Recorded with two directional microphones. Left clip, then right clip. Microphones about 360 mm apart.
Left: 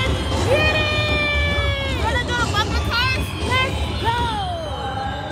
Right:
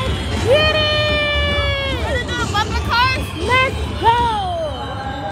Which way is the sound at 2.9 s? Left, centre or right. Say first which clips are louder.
Right 5 dB; centre.